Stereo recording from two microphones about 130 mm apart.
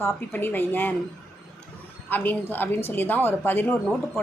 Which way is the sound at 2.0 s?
15° left (ahead or behind).